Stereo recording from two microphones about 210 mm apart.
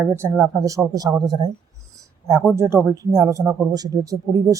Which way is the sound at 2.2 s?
15° right (ahead or behind).